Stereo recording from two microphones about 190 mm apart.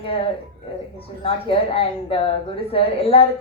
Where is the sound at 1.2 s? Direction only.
30° left (ahead or behind).